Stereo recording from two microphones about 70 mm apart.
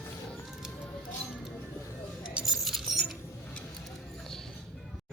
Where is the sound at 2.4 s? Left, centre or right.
Centre.